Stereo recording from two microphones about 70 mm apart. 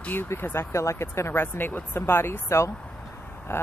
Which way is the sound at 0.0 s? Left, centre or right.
Left.